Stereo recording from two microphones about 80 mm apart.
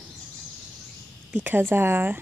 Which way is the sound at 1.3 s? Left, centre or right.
Right.